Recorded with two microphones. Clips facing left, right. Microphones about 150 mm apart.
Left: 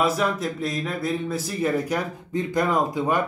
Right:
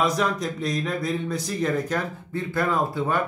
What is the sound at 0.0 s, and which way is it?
Speech, 5° left (ahead or behind).